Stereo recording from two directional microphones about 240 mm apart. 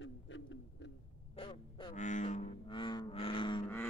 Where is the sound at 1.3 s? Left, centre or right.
Left.